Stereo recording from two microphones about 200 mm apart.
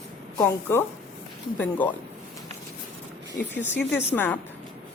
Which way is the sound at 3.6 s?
10° left (ahead or behind).